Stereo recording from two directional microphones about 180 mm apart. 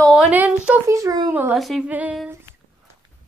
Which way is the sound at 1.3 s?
10° right (ahead or behind).